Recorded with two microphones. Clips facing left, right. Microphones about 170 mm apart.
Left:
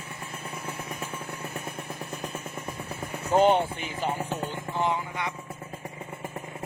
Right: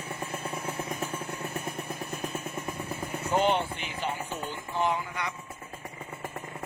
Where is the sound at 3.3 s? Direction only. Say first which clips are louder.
Left 5 dB; 40° left (ahead or behind).